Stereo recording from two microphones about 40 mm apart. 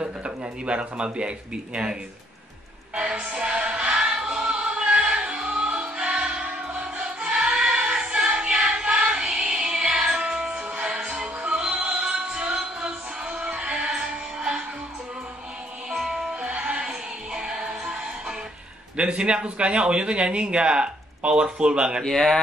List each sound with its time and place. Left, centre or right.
0.0 s speech: right
3.0 s speech: right
3.3 s music: right
7.0 s music: right
15.9 s music: centre
18.9 s speech: right
22.0 s speech: centre